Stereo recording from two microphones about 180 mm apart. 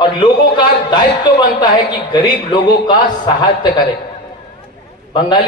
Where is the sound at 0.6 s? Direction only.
25° left (ahead or behind).